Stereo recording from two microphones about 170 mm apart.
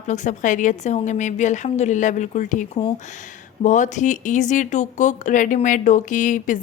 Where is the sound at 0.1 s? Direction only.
45° left (ahead or behind).